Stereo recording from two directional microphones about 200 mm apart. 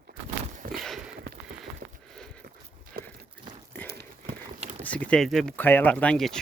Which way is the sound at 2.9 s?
50° right (ahead or behind).